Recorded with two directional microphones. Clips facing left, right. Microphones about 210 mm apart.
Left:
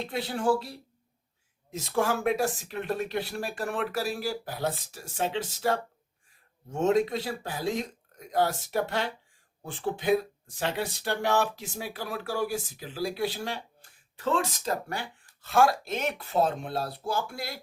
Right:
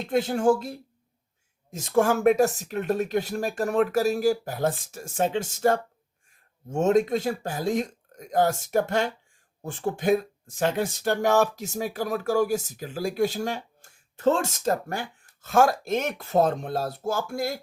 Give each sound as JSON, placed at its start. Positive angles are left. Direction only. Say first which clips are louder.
{"t": 0.0, "sound": "speech", "louder": "right 6 dB", "side_deg": -45}